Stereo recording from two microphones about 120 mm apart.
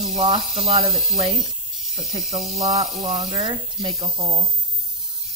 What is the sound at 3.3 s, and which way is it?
Speech, 60° right (ahead or behind).